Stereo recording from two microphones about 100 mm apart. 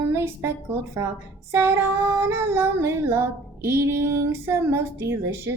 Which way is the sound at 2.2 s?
25° right (ahead or behind).